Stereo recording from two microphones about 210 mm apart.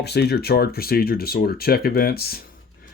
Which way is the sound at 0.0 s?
50° left (ahead or behind).